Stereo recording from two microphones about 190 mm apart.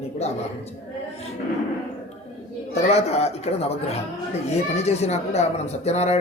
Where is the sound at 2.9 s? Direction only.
35° left (ahead or behind).